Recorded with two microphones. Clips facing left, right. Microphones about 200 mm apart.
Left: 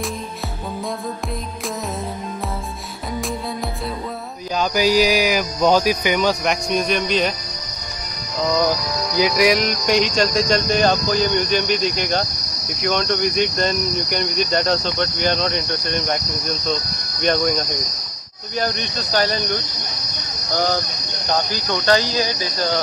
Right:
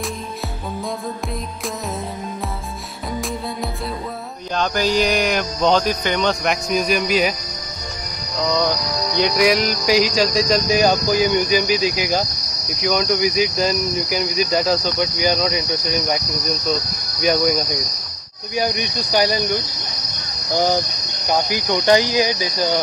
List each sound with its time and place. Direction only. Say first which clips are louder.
4.6 s speech: left 2 dB; 5° left (ahead or behind)
9.1 s speech: even; centre (ahead or behind)
18.6 s cricket: right 2 dB; 10° right (ahead or behind)